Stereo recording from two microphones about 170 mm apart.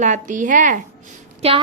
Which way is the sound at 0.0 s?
45° right (ahead or behind).